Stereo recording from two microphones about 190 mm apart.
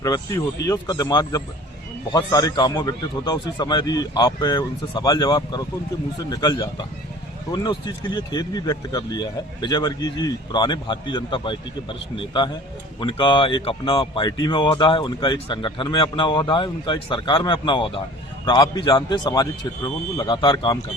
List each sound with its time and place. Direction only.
0.0 s speech: 15° left (ahead or behind)